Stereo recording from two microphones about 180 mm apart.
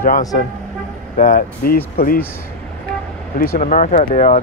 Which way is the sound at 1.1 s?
50° left (ahead or behind).